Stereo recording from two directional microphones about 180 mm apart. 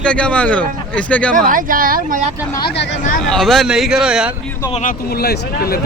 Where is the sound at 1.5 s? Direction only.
50° right (ahead or behind).